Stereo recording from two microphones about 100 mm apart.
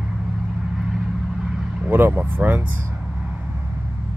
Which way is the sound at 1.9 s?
20° right (ahead or behind).